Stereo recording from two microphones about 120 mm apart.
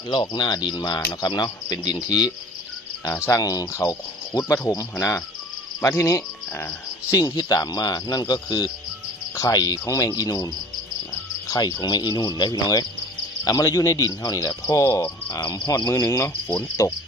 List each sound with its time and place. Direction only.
0.1 s speech: 40° left (ahead or behind)
3.1 s speech: 20° left (ahead or behind)
11.5 s speech: 35° left (ahead or behind)